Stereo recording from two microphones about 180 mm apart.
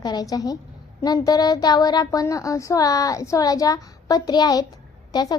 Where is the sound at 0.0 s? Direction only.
20° left (ahead or behind).